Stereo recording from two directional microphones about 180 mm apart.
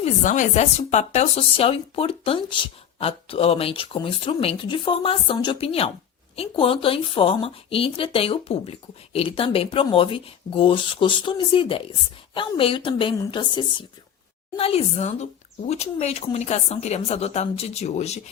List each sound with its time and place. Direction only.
0.0 s speech: 45° left (ahead or behind)